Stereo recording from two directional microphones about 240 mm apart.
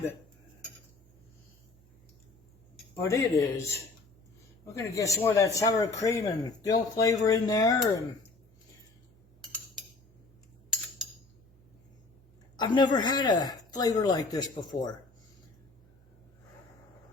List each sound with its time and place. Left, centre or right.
2.9 s a man's voice: centre
9.4 s cutlery: centre
12.5 s a man's voice: centre